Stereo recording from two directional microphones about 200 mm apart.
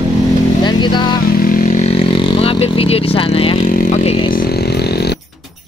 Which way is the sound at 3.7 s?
45° left (ahead or behind).